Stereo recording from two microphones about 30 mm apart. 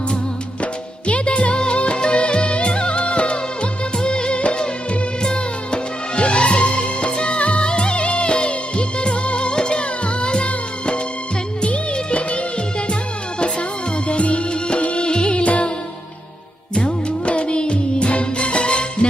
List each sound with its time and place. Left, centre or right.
0.6 s music: left
16.7 s music: left